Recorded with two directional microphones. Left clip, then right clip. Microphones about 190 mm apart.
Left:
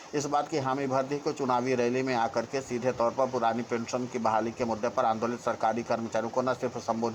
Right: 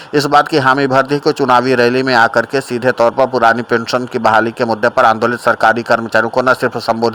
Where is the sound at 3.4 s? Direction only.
50° right (ahead or behind).